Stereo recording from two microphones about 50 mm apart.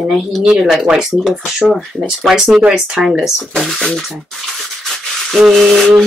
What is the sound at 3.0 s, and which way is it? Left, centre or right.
Speech, centre.